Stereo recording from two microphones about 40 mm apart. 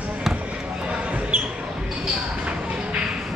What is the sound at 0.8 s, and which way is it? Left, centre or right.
Basketball bounce, right.